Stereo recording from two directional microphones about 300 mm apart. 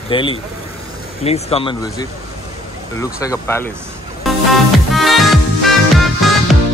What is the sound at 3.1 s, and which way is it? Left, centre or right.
Speech, centre.